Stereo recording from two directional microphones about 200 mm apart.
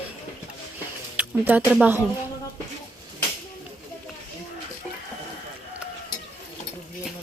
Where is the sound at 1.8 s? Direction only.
10° right (ahead or behind).